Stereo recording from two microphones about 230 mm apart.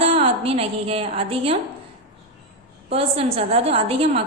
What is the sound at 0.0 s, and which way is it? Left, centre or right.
A woman's voice, right.